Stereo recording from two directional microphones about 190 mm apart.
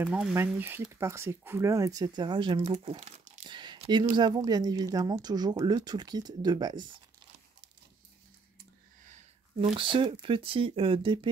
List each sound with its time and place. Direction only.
0.0 s speech: 5° right (ahead or behind)
9.0 s a sound: 40° right (ahead or behind)
9.8 s speech: 25° right (ahead or behind)